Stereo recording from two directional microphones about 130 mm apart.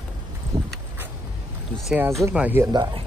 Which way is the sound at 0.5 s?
30° right (ahead or behind).